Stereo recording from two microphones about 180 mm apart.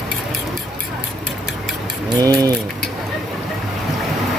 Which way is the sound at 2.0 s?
20° right (ahead or behind).